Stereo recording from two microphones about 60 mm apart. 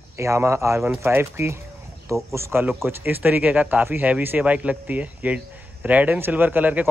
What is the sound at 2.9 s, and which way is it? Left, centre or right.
Speech, right.